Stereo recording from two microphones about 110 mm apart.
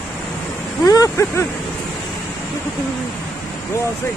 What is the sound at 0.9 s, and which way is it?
Speech, 30° left (ahead or behind).